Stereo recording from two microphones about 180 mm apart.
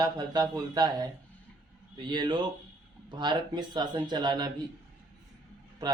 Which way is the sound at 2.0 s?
25° right (ahead or behind).